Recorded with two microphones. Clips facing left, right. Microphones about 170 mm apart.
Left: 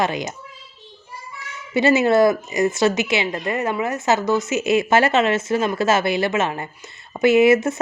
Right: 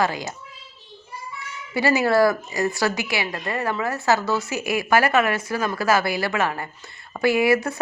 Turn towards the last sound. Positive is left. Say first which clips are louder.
# left 5 dB
turn(degrees=20)  # may be behind; listen again after turning